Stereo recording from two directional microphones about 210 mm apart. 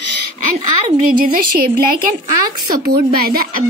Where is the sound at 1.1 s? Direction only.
40° right (ahead or behind).